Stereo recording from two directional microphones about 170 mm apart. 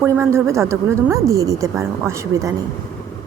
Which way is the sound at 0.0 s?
15° right (ahead or behind).